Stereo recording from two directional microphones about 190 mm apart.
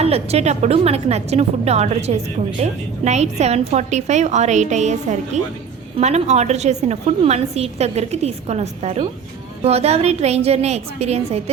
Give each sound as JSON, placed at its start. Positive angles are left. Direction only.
{"t": 0.0, "sound": "a woman's voice", "side_deg": -35}